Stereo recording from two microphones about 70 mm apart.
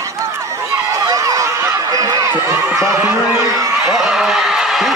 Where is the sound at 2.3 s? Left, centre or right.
Right.